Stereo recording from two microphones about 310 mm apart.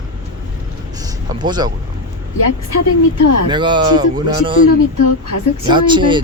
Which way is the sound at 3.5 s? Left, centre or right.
Centre.